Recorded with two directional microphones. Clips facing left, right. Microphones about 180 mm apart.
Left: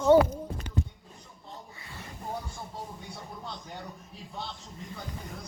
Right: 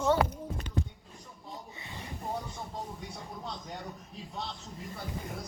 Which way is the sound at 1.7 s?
20° right (ahead or behind).